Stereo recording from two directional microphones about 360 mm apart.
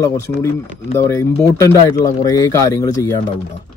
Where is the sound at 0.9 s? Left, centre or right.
Centre.